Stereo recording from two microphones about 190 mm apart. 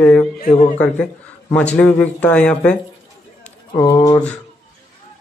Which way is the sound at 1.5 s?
5° left (ahead or behind).